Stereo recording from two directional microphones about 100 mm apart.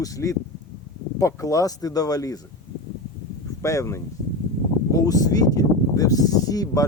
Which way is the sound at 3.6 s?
30° left (ahead or behind).